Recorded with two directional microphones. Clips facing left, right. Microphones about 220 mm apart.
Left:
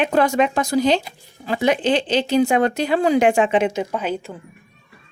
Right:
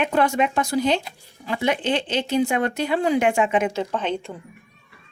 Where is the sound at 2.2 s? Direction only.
35° left (ahead or behind).